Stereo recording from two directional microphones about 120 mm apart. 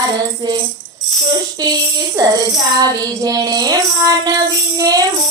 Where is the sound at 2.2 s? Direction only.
30° right (ahead or behind).